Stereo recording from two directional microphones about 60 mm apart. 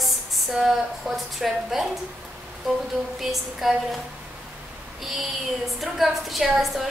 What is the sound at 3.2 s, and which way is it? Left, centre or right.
Speech, centre.